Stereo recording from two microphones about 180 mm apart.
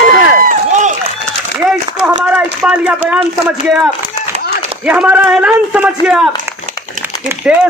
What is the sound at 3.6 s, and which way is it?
A man's voice, 5° right (ahead or behind).